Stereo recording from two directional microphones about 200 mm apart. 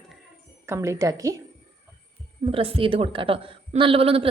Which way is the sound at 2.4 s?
30° right (ahead or behind).